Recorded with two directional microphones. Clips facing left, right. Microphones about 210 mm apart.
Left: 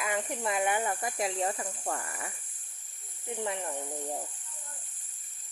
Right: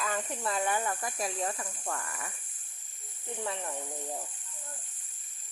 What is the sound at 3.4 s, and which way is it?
Speech, 15° left (ahead or behind).